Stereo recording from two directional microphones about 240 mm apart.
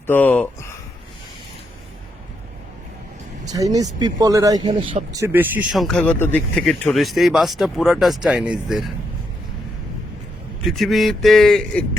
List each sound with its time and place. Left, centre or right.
0.1 s speech: centre
3.4 s speech: centre
10.7 s speech: centre